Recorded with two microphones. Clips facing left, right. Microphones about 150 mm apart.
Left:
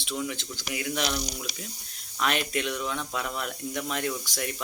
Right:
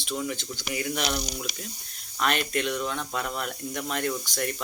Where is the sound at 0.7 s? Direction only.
Centre (ahead or behind).